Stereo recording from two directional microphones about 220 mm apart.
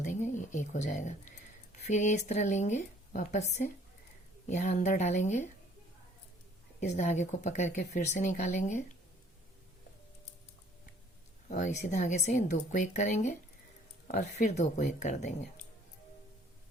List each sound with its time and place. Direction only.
0.0 s a sound: 35° left (ahead or behind)
1.9 s speech: 35° left (ahead or behind)
6.7 s speech: 30° left (ahead or behind)
11.4 s speech: 35° left (ahead or behind)